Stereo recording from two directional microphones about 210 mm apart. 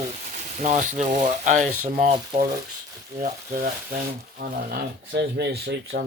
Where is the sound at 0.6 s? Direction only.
35° right (ahead or behind).